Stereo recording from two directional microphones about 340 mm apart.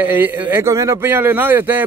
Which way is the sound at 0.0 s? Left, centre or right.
Centre.